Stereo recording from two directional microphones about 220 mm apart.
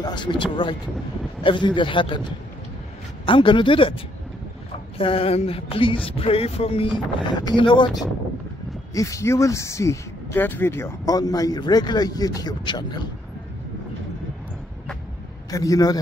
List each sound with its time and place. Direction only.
0.0 s music: 20° left (ahead or behind)
8.9 s speech: 15° left (ahead or behind)
15.5 s speech: 15° left (ahead or behind)